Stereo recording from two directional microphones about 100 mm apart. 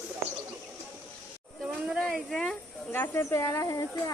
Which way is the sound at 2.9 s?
20° left (ahead or behind).